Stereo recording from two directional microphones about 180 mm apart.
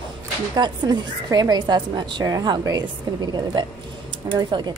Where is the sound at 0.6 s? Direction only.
25° right (ahead or behind).